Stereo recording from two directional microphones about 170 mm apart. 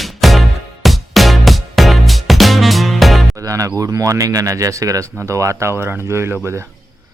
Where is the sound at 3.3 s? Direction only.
20° right (ahead or behind).